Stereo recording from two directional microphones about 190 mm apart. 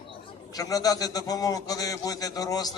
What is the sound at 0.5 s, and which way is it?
A man's voice, 20° left (ahead or behind).